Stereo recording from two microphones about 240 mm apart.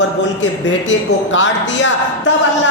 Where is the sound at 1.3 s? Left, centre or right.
Left.